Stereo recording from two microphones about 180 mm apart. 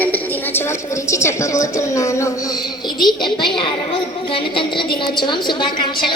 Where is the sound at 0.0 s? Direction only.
10° left (ahead or behind).